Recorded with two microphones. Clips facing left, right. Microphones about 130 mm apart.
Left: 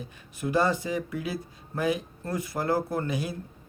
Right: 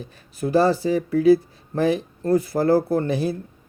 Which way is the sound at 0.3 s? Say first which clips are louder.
Right 7 dB; 35° right (ahead or behind).